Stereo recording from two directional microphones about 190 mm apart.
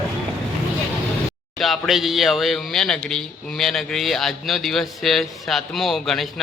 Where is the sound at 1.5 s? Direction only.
Centre (ahead or behind).